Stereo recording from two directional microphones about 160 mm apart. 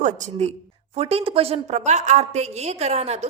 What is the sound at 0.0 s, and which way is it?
A woman's voice, 45° right (ahead or behind).